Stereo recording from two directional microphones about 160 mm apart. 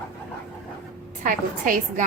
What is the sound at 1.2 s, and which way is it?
Speech, 55° right (ahead or behind).